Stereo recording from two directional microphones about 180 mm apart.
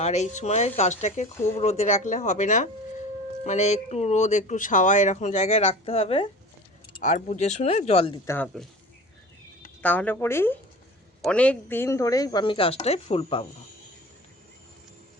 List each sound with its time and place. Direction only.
0.0 s speech: 40° left (ahead or behind)
9.8 s a woman's voice: 10° left (ahead or behind); by 13.5 s 30° left (ahead or behind)